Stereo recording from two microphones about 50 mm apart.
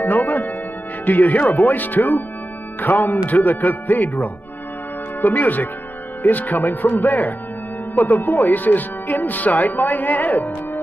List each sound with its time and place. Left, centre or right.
0.0 s music: left
1.0 s speech: left